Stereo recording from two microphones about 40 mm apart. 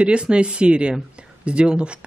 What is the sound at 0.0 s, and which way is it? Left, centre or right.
Speech, right.